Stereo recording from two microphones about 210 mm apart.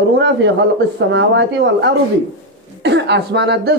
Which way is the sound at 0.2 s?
55° right (ahead or behind).